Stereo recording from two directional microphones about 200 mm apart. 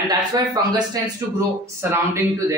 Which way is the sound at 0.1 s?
20° right (ahead or behind).